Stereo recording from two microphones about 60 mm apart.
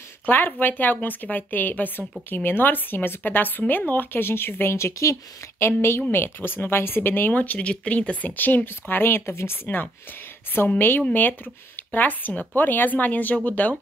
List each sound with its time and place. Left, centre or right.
0.3 s speech: left
4.7 s speech: left
5.6 s speech: left